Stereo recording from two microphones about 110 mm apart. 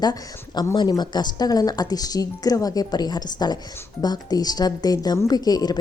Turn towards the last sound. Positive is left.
turn(degrees=35)  # may be behind; listen again after turning